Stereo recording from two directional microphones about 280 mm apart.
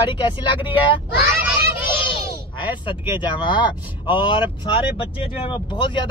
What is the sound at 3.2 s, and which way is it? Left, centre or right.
Speech, centre.